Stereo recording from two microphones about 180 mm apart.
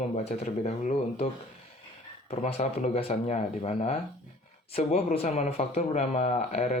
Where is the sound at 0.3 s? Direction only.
40° left (ahead or behind).